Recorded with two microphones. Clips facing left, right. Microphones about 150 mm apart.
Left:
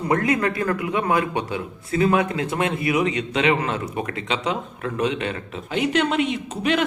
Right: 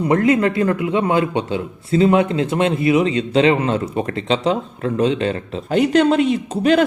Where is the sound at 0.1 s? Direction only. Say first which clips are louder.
Right 5 dB; 25° right (ahead or behind).